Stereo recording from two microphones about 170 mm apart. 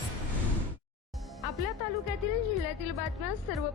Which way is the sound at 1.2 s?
Centre (ahead or behind).